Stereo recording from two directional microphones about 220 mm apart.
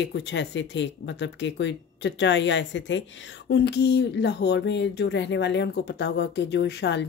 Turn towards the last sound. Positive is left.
turn(degrees=50)  # may be behind; listen again after turning